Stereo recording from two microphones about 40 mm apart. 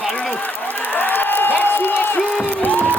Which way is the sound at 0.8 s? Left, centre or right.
Left.